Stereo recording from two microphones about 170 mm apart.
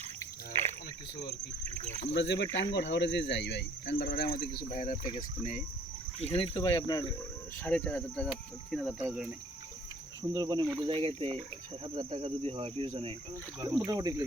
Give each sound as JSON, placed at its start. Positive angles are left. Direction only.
{"t": 1.6, "sound": "speech", "side_deg": -40}
{"t": 2.0, "sound": "speech", "side_deg": 90}
{"t": 4.0, "sound": "speech", "side_deg": 60}
{"t": 6.3, "sound": "speech", "side_deg": 30}
{"t": 6.7, "sound": "speech", "side_deg": 20}
{"t": 7.6, "sound": "cricket", "side_deg": 10}
{"t": 8.7, "sound": "speech", "side_deg": 0}
{"t": 10.3, "sound": "speech", "side_deg": -25}